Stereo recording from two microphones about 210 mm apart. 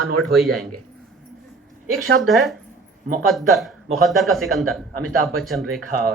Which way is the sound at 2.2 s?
Centre (ahead or behind).